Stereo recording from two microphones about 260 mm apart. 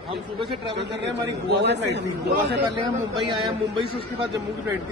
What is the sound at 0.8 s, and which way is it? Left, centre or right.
A man's voice, right.